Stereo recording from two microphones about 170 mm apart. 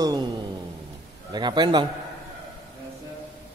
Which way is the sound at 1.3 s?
25° right (ahead or behind).